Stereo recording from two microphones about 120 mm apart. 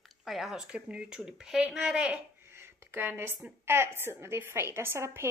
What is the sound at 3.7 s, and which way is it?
A woman's voice, 20° right (ahead or behind).